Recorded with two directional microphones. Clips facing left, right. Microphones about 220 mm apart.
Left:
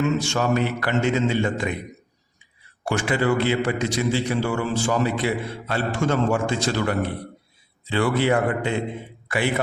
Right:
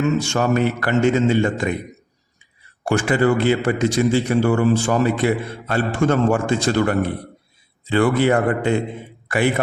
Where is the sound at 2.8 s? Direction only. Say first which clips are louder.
Right 5 dB; 45° right (ahead or behind).